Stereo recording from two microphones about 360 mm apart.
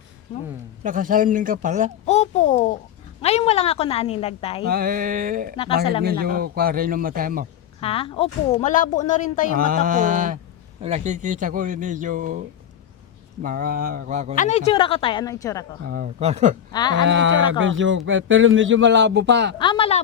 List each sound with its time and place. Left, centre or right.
0.9 s speech: right
2.0 s a woman's voice: centre
4.6 s speech: right
7.8 s a woman's voice: centre
9.6 s speech: right
13.4 s speech: right
14.3 s speech: centre
15.9 s speech: right
16.9 s speech: right
19.5 s speech: centre